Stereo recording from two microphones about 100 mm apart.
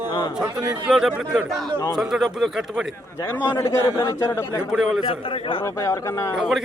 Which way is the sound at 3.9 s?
40° left (ahead or behind).